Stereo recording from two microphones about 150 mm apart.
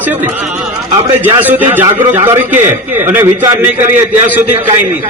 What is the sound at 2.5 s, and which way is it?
Speech, 55° right (ahead or behind).